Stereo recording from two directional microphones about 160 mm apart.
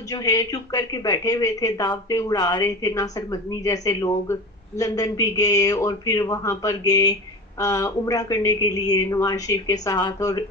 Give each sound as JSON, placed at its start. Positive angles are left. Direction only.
{"t": 0.1, "sound": "speech", "side_deg": 20}